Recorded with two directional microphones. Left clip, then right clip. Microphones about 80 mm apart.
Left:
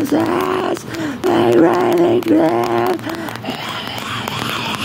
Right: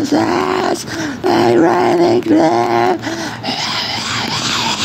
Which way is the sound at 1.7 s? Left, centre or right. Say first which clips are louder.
Right 2 dB; centre.